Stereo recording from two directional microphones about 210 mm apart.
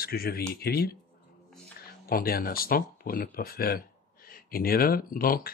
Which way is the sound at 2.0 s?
45° left (ahead or behind).